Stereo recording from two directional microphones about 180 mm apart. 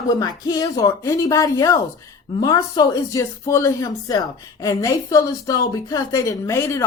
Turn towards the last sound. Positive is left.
turn(degrees=15)  # may be behind; listen again after turning